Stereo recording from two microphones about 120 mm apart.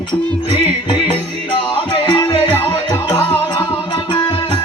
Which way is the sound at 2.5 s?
20° left (ahead or behind).